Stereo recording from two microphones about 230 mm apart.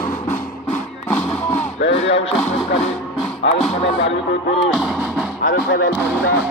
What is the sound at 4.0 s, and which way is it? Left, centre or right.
Speech, left.